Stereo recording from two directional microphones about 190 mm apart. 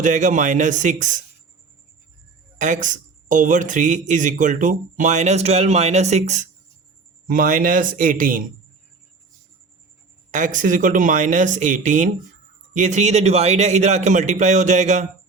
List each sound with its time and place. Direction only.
0.0 s speech: 40° right (ahead or behind)
2.6 s a man's voice: 40° right (ahead or behind)
10.3 s speech: 40° right (ahead or behind)